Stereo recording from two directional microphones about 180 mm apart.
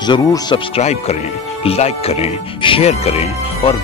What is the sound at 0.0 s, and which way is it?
Speech, 25° left (ahead or behind).